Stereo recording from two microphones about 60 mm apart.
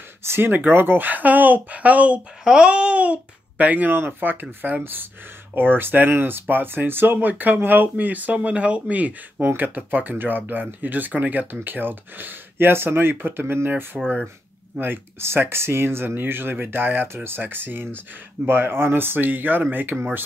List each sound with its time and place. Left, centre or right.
0.2 s speech: right
0.5 s speech: right